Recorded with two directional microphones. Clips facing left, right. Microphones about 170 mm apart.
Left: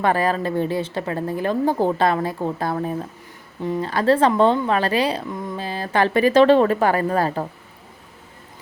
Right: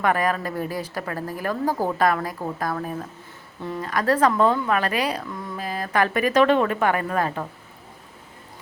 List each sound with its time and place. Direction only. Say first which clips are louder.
0.0 s speech: left 3 dB; 30° left (ahead or behind)